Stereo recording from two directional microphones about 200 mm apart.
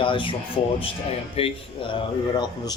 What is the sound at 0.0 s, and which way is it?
Speech, 25° left (ahead or behind).